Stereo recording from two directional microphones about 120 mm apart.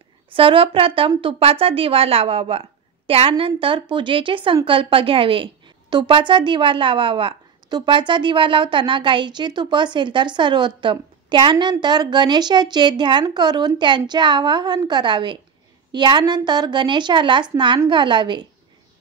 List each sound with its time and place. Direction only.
0.3 s a woman's voice: 45° right (ahead or behind)